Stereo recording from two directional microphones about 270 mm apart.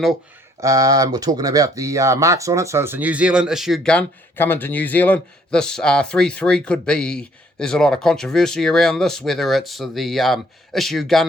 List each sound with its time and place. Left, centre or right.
0.6 s speech: centre